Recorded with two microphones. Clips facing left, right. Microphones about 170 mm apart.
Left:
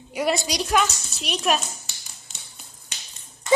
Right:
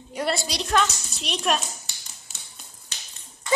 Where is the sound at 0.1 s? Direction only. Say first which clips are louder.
Left 3 dB; 10° left (ahead or behind).